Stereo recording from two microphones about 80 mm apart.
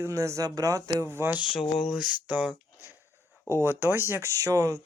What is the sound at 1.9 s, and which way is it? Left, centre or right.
Speech, centre.